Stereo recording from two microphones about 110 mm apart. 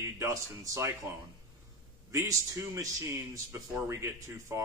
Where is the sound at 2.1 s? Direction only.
30° right (ahead or behind).